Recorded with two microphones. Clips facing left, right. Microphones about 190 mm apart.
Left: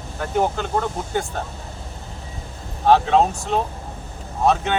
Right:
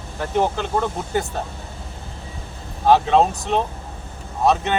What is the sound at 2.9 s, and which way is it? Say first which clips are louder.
Speech: even; centre (ahead or behind).